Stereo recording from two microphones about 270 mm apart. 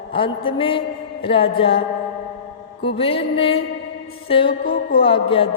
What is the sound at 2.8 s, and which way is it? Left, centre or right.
A woman's voice, left.